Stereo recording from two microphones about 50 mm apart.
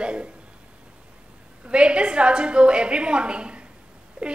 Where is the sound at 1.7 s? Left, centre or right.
Right.